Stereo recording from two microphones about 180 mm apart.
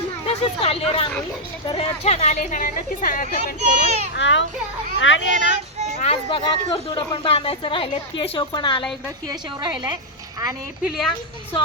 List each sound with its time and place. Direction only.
0.3 s a woman's voice: 30° left (ahead or behind); by 3.3 s 50° left (ahead or behind)
3.6 s a child's voice: 35° right (ahead or behind)
4.1 s a child's voice: 85° left
6.0 s speech: 30° left (ahead or behind)